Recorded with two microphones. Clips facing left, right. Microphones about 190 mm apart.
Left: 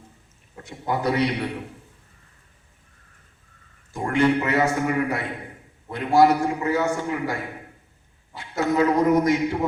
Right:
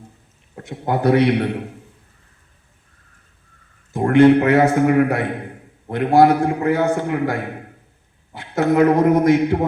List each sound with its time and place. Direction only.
0.5 s a man's voice: 60° right (ahead or behind)
3.9 s a man's voice: 55° right (ahead or behind)